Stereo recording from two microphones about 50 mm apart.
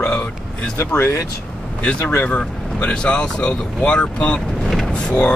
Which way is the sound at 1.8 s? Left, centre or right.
Left.